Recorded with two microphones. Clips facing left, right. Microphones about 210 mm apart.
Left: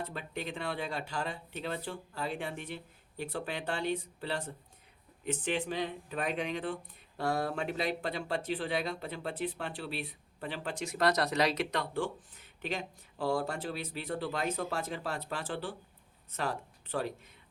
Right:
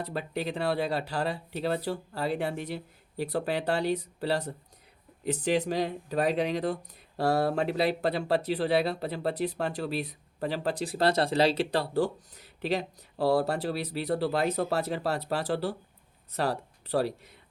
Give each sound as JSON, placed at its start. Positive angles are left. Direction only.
{"t": 0.0, "sound": "speech", "side_deg": -35}